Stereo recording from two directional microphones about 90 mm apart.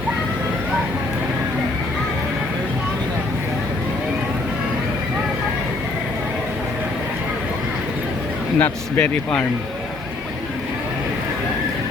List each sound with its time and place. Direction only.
8.5 s speech: 20° left (ahead or behind)